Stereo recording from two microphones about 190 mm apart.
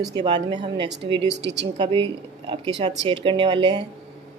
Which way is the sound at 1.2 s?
65° right (ahead or behind).